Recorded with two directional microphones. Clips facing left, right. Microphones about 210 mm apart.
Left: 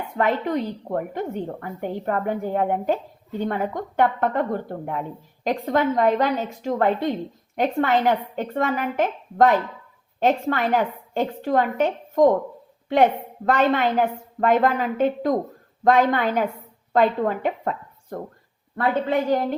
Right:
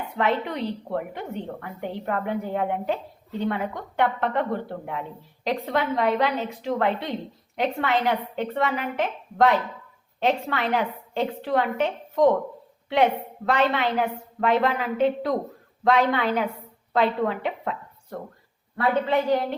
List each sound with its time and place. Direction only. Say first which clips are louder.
0.2 s a woman's voice: left 3 dB; 45° left (ahead or behind)